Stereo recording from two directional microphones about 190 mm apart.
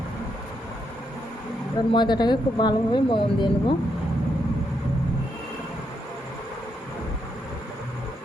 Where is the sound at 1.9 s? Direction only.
25° left (ahead or behind).